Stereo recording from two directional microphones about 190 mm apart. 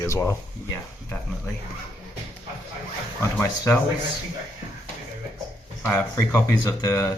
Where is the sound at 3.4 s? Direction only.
15° left (ahead or behind).